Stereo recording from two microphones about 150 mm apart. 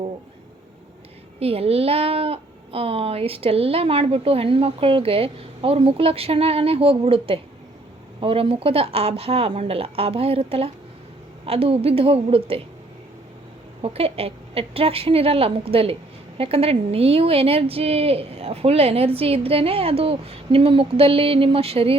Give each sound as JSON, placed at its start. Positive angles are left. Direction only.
{"t": 1.4, "sound": "speech", "side_deg": -40}
{"t": 13.8, "sound": "speech", "side_deg": -40}